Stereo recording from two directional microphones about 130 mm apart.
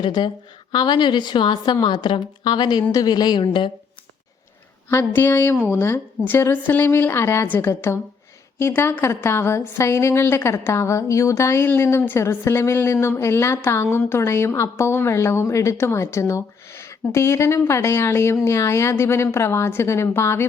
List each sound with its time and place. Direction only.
0.0 s a woman's voice: 35° left (ahead or behind)
4.9 s a woman's voice: 15° left (ahead or behind)